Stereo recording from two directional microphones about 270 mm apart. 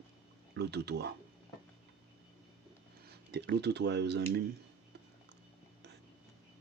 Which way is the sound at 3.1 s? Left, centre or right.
Right.